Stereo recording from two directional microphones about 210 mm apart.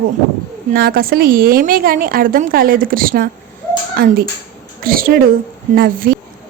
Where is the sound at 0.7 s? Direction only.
45° right (ahead or behind).